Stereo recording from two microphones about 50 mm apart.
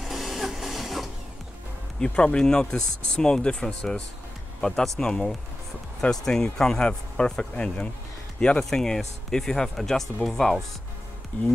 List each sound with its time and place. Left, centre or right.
0.0 s printer: centre
2.0 s speech: centre
8.5 s speech: centre